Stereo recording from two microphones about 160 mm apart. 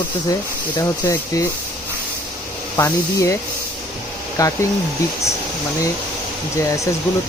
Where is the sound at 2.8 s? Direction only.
20° left (ahead or behind).